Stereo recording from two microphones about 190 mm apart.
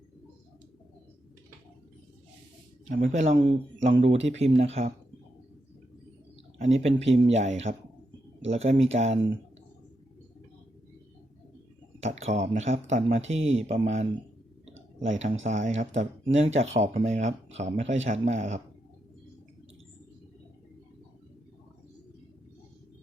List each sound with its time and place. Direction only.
3.0 s speech: 40° right (ahead or behind)
6.6 s speech: 35° right (ahead or behind)
11.9 s speech: 35° right (ahead or behind)
15.4 s speech: 40° right (ahead or behind)